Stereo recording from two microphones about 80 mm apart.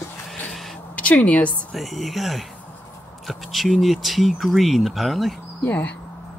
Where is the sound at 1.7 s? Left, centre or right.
Centre.